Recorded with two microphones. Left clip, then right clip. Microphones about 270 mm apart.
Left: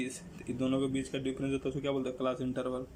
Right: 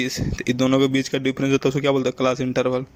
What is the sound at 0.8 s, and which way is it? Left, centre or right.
Speech, right.